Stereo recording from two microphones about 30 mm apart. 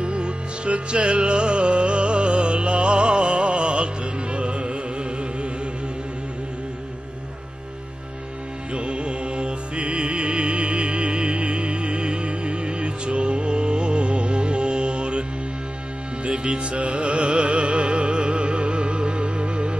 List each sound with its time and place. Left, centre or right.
0.0 s music: right
8.7 s music: right
16.3 s music: right